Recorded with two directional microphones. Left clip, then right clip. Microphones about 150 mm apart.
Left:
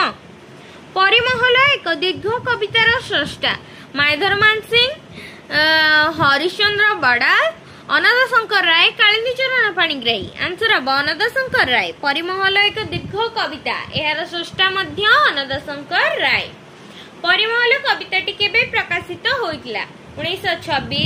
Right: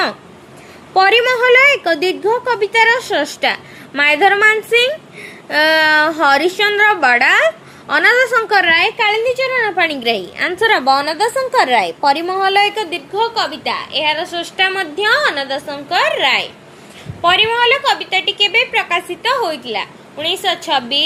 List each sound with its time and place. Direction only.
0.9 s a woman's voice: 30° right (ahead or behind)
13.1 s a woman's voice: 55° right (ahead or behind)
17.2 s a woman's voice: 40° right (ahead or behind)